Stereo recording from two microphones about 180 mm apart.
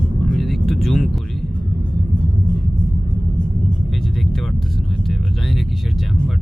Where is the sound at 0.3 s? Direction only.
Centre (ahead or behind).